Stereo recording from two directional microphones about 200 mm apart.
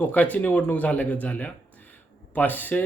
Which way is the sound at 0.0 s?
10° left (ahead or behind).